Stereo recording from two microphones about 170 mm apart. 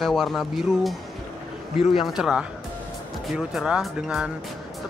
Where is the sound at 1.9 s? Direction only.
Centre (ahead or behind).